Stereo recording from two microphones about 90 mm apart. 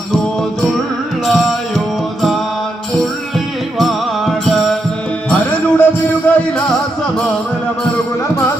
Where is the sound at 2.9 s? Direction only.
5° left (ahead or behind).